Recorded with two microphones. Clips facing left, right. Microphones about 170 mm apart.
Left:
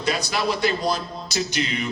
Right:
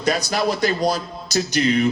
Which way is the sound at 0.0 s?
45° right (ahead or behind).